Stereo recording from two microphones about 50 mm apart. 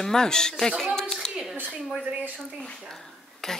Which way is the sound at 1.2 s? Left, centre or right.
Centre.